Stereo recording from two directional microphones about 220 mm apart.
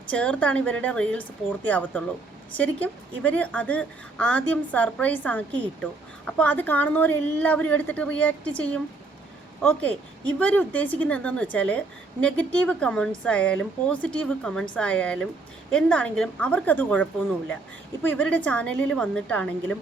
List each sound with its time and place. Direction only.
0.1 s a woman's voice: 5° left (ahead or behind)